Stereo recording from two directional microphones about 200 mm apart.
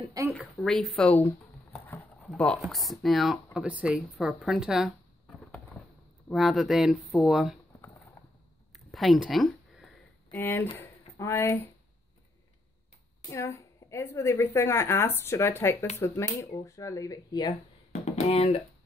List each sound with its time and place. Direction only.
0.4 s speech: centre (ahead or behind)
6.2 s speech: centre (ahead or behind)
8.7 s a sound: centre (ahead or behind)
10.3 s speech: 10° left (ahead or behind)
13.3 s a woman's voice: 15° left (ahead or behind)
18.0 s speech: 30° left (ahead or behind)